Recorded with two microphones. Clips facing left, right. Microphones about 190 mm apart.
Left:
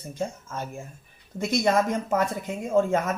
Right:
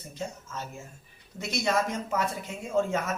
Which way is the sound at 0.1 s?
50° left (ahead or behind).